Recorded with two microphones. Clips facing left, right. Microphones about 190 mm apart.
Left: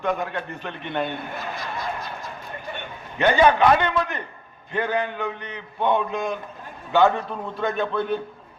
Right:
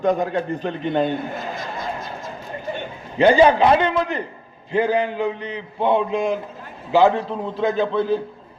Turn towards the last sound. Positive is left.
turn(degrees=-30)  # may be behind; listen again after turning